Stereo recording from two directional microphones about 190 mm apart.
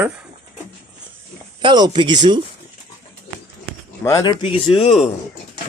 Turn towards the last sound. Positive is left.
turn(degrees=30)  # may be behind; listen again after turning